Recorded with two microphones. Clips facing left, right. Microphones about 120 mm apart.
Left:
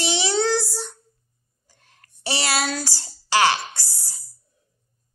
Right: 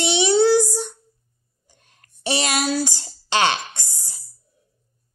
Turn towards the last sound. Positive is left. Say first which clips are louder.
# even
turn(degrees=-20)  # may be behind; listen again after turning